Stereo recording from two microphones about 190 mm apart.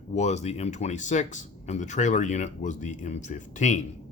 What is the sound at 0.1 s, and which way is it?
Speech, 35° left (ahead or behind).